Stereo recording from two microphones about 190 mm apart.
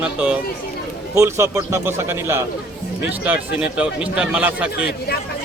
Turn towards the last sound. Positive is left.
turn(degrees=-5)  # may be behind; listen again after turning